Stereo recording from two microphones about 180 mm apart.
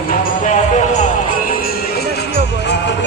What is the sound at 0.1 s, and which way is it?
Music, 45° left (ahead or behind).